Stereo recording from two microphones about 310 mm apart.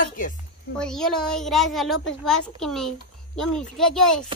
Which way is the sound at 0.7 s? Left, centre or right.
Centre.